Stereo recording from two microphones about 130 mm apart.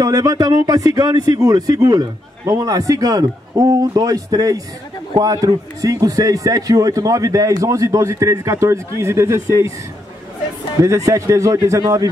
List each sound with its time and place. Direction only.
0.0 s a man's voice: 25° right (ahead or behind)
10.8 s a man's voice: 25° right (ahead or behind)